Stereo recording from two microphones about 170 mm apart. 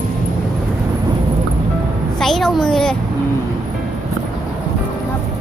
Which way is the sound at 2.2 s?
Centre (ahead or behind).